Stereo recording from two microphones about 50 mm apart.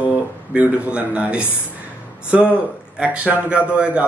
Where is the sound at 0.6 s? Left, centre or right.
Right.